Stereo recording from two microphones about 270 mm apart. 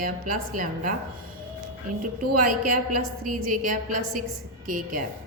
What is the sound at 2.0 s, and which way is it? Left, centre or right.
A woman's voice, right.